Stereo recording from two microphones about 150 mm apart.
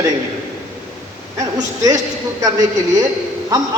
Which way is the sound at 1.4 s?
25° right (ahead or behind).